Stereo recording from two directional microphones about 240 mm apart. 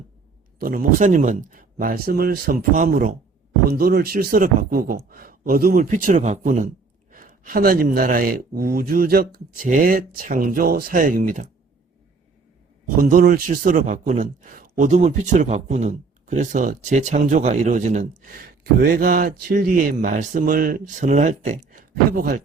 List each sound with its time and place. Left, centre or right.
0.6 s a man's voice: right
13.0 s a man's voice: right